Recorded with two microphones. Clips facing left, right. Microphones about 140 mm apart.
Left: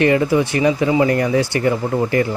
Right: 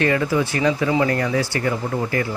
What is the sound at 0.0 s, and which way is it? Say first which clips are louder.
Speech: left 4 dB; 20° left (ahead or behind).